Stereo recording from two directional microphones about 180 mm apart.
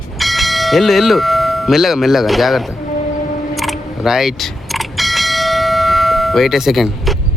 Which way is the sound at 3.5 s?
Centre (ahead or behind).